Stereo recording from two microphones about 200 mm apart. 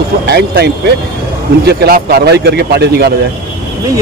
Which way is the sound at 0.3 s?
55° right (ahead or behind).